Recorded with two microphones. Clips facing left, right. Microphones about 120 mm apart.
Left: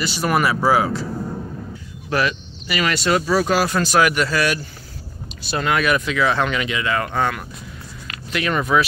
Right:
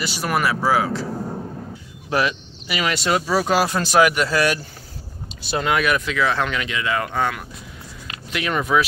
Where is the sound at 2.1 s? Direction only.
20° right (ahead or behind).